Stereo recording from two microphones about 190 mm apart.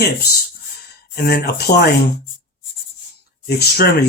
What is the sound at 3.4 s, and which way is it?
Speech, 60° left (ahead or behind).